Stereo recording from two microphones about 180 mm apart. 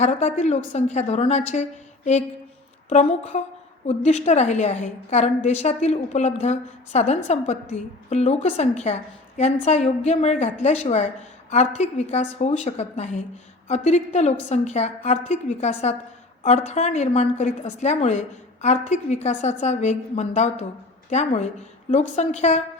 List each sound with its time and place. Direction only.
0.0 s a woman's voice: 40° left (ahead or behind)
2.9 s a woman's voice: 40° left (ahead or behind)